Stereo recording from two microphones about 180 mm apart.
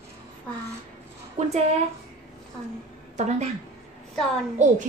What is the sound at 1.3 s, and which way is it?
Speech, 40° right (ahead or behind).